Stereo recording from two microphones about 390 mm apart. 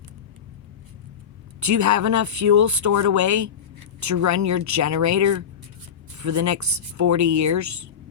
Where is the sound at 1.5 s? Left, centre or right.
Right.